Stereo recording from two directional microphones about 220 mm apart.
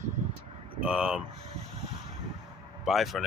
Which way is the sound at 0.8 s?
5° right (ahead or behind).